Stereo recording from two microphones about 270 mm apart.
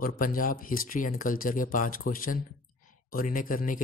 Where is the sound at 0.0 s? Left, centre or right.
Left.